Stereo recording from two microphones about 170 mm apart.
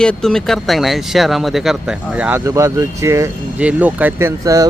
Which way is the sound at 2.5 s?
20° right (ahead or behind).